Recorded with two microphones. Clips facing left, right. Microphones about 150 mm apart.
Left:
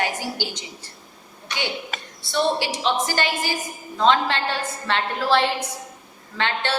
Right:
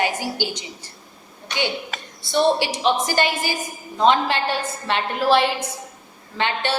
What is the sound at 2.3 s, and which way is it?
A woman's voice, 15° right (ahead or behind).